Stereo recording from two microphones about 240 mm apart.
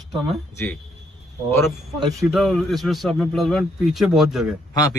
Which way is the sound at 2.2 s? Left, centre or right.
Centre.